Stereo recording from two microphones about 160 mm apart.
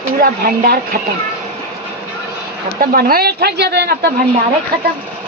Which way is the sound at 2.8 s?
65° right (ahead or behind).